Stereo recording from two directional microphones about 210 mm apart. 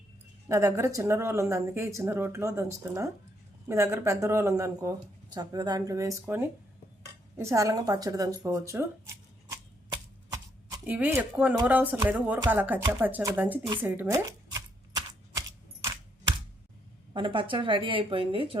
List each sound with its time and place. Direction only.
0.4 s speech: 15° right (ahead or behind)
9.5 s a sound: 15° right (ahead or behind)
10.8 s speech: 10° right (ahead or behind)
13.7 s typewriter: 10° right (ahead or behind)
17.2 s speech: 25° right (ahead or behind)